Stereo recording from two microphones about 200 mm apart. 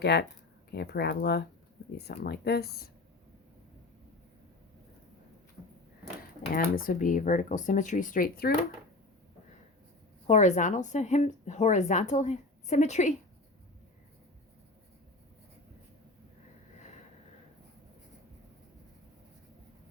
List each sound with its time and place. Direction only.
0.0 s speech: 55° left (ahead or behind)
6.5 s speech: 45° left (ahead or behind)
10.2 s speech: 35° left (ahead or behind)